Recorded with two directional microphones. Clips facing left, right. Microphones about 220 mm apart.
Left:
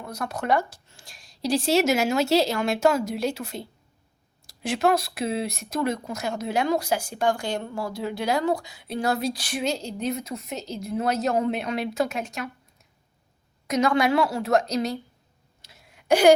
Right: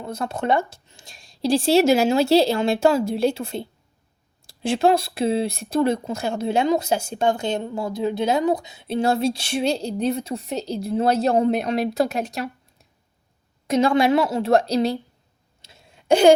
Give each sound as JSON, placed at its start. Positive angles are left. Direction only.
{"t": 0.0, "sound": "speech", "side_deg": -25}
{"t": 13.7, "sound": "speech", "side_deg": -30}
{"t": 15.6, "sound": "a sound", "side_deg": -25}